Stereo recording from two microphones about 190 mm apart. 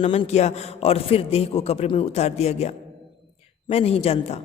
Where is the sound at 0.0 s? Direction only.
35° left (ahead or behind).